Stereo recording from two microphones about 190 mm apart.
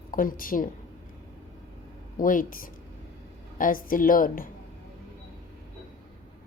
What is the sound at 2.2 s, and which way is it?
A woman's voice, 45° left (ahead or behind).